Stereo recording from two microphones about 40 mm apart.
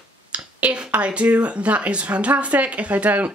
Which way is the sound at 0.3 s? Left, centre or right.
Right.